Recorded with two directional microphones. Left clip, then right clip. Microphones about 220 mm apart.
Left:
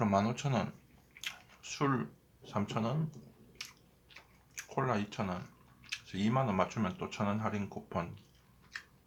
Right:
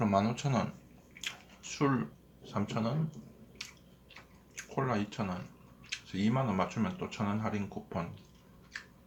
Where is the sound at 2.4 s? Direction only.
20° left (ahead or behind).